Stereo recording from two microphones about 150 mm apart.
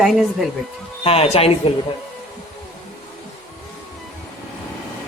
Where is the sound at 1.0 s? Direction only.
40° left (ahead or behind).